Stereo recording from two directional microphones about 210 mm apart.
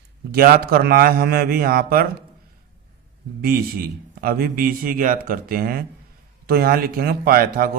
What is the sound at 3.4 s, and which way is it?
Speech, 45° right (ahead or behind).